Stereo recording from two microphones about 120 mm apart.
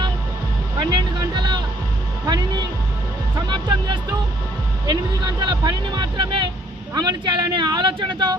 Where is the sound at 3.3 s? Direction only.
40° right (ahead or behind).